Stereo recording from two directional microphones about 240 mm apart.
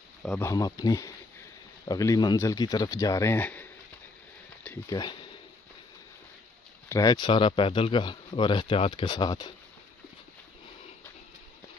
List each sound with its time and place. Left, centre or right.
0.2 s speech: centre
0.5 s speech: centre
4.6 s speech: centre
6.9 s speech: centre